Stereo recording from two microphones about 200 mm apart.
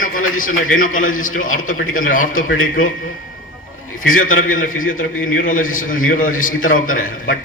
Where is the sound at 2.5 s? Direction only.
90° left.